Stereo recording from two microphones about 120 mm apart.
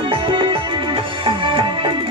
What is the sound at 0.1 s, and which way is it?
Music, 45° right (ahead or behind).